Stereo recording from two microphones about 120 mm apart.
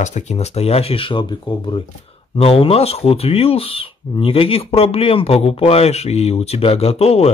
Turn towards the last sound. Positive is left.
turn(degrees=55)  # may be behind; listen again after turning